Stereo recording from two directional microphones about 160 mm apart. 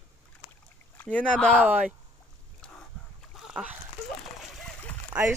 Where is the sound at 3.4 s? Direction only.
5° right (ahead or behind).